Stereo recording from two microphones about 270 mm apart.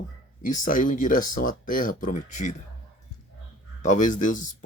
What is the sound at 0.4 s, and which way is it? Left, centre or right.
Speech, left.